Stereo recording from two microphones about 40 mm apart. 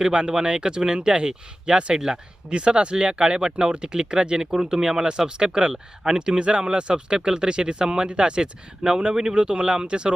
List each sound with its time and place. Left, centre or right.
0.0 s speech: right